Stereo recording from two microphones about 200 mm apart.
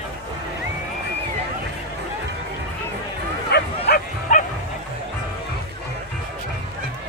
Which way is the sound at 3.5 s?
50° left (ahead or behind).